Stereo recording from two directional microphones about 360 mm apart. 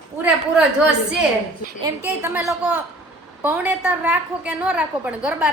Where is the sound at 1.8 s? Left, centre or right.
Centre.